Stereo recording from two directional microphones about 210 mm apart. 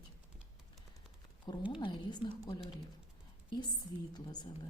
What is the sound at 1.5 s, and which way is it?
A woman's voice, 20° left (ahead or behind).